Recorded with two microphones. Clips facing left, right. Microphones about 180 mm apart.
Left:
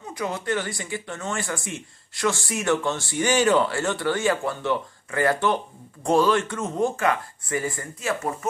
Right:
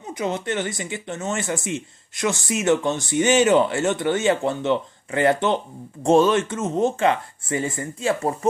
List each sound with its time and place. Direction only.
0.1 s speech: 20° right (ahead or behind)